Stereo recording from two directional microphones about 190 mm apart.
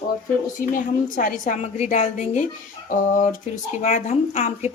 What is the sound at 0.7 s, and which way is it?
A woman's voice, 45° left (ahead or behind).